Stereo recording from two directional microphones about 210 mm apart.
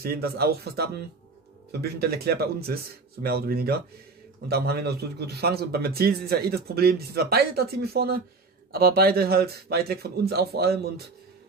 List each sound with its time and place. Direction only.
0.0 s a man's voice: 45° right (ahead or behind)